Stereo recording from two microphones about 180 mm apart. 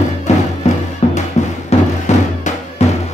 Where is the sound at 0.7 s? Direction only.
40° left (ahead or behind).